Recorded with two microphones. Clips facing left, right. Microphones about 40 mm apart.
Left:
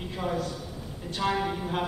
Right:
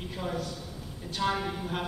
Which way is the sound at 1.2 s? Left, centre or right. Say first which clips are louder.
Left 2 dB; centre.